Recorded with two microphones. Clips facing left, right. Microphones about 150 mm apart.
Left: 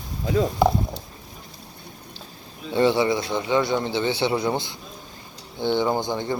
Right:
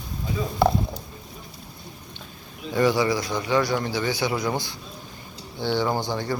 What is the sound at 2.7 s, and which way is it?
Speech, 25° left (ahead or behind).